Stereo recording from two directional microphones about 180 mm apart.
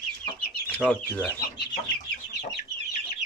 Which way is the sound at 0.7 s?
10° left (ahead or behind).